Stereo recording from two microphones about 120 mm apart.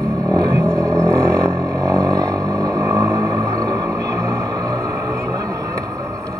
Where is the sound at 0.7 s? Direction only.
5° left (ahead or behind).